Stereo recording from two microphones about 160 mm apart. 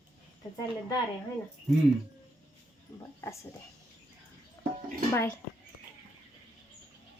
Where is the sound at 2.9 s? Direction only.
20° left (ahead or behind).